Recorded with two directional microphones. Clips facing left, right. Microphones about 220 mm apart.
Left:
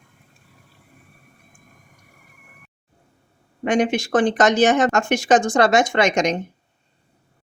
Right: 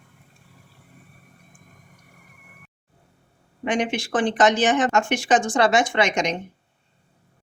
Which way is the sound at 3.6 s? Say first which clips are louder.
Left 5 dB; 45° left (ahead or behind).